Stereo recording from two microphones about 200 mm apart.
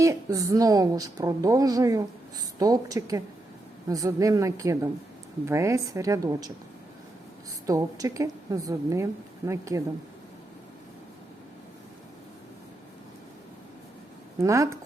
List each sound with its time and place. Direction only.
0.0 s a woman's voice: 15° right (ahead or behind)
7.7 s a woman's voice: 15° right (ahead or behind)
14.3 s a woman's voice: 15° right (ahead or behind)